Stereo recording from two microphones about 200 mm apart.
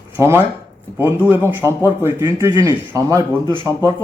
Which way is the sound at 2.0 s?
10° right (ahead or behind).